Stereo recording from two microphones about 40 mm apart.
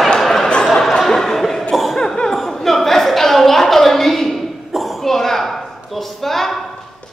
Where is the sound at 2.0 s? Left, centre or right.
Centre.